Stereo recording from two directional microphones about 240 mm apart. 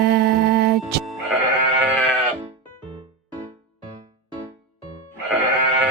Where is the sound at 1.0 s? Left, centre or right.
Centre.